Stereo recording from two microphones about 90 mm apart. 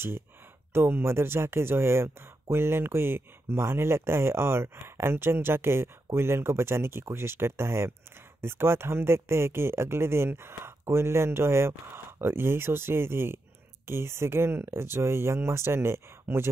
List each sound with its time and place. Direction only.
0.7 s speech: 25° right (ahead or behind)